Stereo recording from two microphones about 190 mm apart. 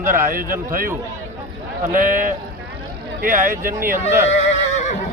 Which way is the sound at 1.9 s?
45° right (ahead or behind).